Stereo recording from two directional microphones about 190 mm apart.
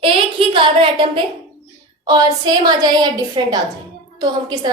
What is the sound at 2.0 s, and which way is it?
A woman's voice, 20° right (ahead or behind).